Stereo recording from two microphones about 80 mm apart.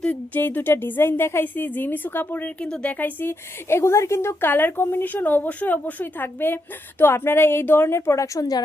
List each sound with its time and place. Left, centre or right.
0.0 s speech: left
3.0 s a woman's voice: left